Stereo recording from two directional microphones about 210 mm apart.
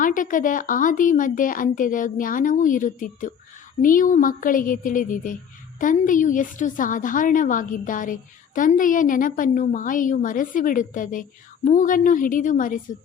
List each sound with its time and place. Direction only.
0.0 s a woman's voice: 40° left (ahead or behind)